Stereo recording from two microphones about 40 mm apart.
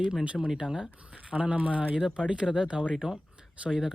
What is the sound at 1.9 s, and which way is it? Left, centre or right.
Speech, right.